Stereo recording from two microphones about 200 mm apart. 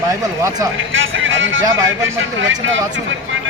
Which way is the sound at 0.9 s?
75° right (ahead or behind).